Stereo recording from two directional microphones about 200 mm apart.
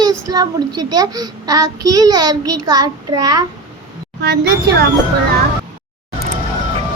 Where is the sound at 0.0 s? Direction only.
20° right (ahead or behind).